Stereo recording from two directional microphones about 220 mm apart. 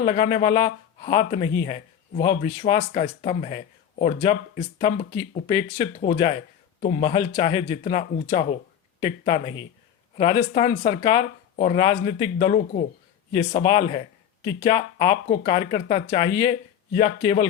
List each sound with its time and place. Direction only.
0.0 s speech: 35° left (ahead or behind)
0.3 s speech: 20° left (ahead or behind)
6.7 s speech: 30° left (ahead or behind)
9.0 s speech: 20° left (ahead or behind)